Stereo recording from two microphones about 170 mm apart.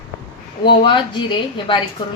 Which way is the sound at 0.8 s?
30° left (ahead or behind).